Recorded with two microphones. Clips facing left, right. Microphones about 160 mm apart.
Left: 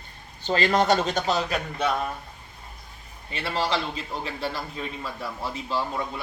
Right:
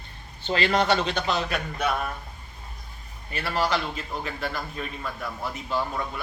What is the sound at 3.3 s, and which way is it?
A man's voice, 25° left (ahead or behind).